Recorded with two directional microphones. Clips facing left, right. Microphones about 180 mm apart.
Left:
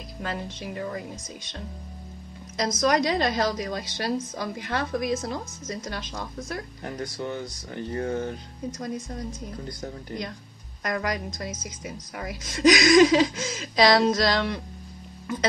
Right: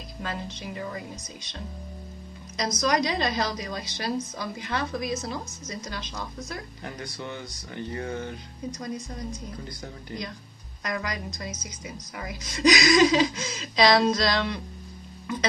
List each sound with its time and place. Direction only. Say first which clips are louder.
0.2 s a woman's voice: left 2 dB; 50° left (ahead or behind)
2.8 s a woman's voice: left 3 dB; 50° left (ahead or behind)
10.8 s a woman's voice: left 3 dB; 50° left (ahead or behind)